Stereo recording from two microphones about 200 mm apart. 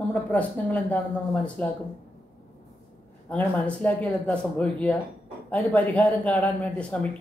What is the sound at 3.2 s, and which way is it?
Speech, 5° left (ahead or behind).